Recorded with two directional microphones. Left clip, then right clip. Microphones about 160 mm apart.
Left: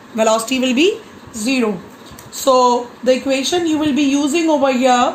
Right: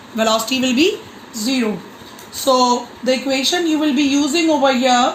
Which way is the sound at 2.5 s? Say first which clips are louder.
Left 2 dB; 70° left (ahead or behind).